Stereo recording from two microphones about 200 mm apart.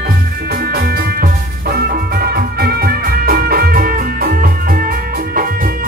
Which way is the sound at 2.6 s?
50° right (ahead or behind).